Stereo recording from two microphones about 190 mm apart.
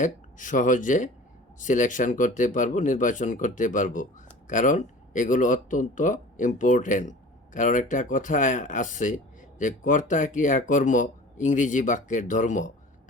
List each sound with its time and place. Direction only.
0.0 s speech: 40° left (ahead or behind)